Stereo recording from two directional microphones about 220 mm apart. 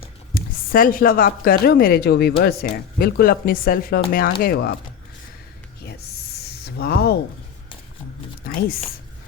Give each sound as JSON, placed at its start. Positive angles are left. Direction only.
{"t": 0.0, "sound": "a woman's voice", "side_deg": 40}
{"t": 6.7, "sound": "speech", "side_deg": 45}
{"t": 8.4, "sound": "speech", "side_deg": 40}